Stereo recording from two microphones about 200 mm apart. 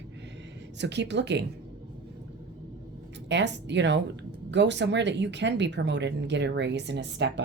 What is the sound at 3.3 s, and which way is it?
A woman's voice, 60° right (ahead or behind).